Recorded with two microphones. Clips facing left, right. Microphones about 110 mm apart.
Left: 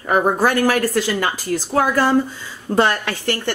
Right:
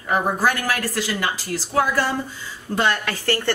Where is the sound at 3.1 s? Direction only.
20° left (ahead or behind).